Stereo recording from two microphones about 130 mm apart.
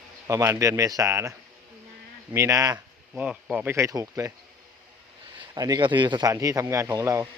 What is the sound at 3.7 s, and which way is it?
Speech, 25° right (ahead or behind).